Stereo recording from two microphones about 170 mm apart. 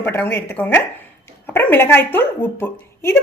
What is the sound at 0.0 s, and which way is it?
Speech, 10° left (ahead or behind).